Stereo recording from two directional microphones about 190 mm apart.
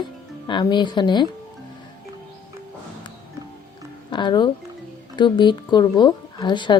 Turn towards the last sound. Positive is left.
turn(degrees=25)  # may be behind; listen again after turning